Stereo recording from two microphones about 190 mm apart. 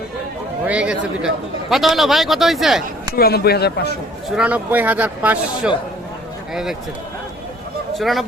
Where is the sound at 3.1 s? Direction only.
55° left (ahead or behind).